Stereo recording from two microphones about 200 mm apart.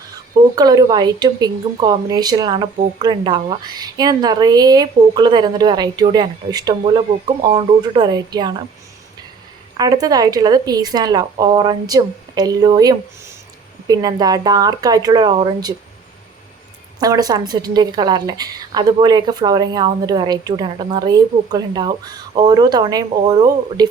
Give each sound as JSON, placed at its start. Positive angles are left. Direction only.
{"t": 0.5, "sound": "a woman's voice", "side_deg": -20}
{"t": 9.7, "sound": "a woman's voice", "side_deg": -20}
{"t": 17.0, "sound": "a woman's voice", "side_deg": -20}